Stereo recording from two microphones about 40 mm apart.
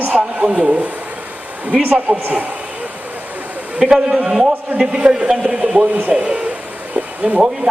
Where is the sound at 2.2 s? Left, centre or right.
Right.